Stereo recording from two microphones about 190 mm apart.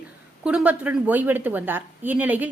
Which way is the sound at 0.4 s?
5° right (ahead or behind).